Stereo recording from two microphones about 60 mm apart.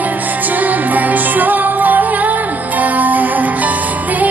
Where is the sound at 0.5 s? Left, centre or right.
Right.